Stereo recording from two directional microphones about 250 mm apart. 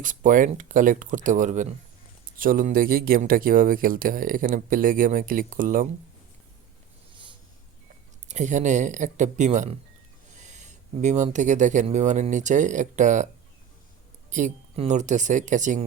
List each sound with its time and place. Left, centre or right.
0.0 s speech: right
8.3 s speech: right
14.3 s speech: right